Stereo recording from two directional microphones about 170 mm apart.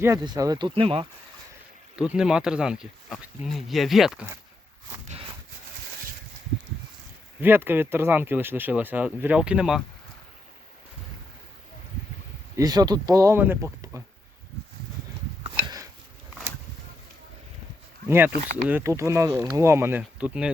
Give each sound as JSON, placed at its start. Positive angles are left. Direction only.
{"t": 0.0, "sound": "speech", "side_deg": -20}
{"t": 2.0, "sound": "speech", "side_deg": -5}
{"t": 7.4, "sound": "speech", "side_deg": -15}
{"t": 12.5, "sound": "speech", "side_deg": -25}
{"t": 15.4, "sound": "a sound", "side_deg": -25}
{"t": 18.5, "sound": "speech", "side_deg": -10}